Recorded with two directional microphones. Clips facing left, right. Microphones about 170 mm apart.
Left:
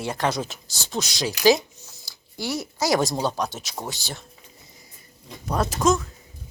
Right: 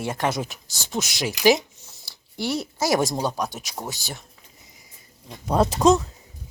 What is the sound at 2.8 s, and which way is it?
Speech, 25° right (ahead or behind).